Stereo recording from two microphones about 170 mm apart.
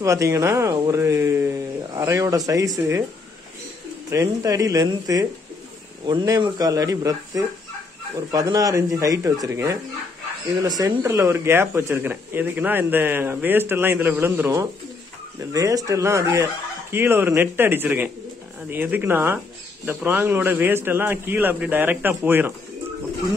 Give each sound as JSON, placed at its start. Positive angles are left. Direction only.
{"t": 0.0, "sound": "speech", "side_deg": -20}
{"t": 4.1, "sound": "speech", "side_deg": -20}
{"t": 10.8, "sound": "speech", "side_deg": -20}